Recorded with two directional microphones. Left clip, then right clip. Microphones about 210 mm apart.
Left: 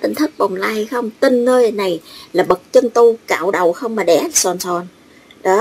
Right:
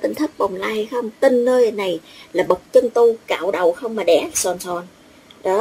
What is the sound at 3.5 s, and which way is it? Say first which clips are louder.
Speech: left 3 dB; 25° left (ahead or behind).